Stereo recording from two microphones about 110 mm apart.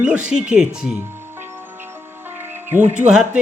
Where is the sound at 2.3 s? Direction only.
20° right (ahead or behind).